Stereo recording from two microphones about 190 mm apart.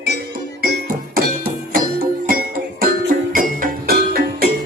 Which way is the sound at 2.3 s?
50° right (ahead or behind).